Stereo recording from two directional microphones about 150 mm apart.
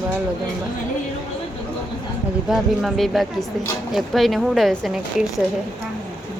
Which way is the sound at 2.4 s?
Centre (ahead or behind).